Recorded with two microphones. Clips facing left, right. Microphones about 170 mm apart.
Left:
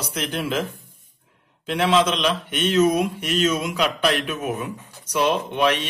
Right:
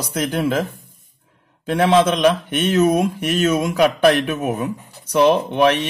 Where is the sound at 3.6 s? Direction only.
50° right (ahead or behind).